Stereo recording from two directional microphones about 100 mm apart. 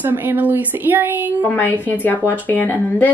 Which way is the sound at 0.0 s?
20° right (ahead or behind).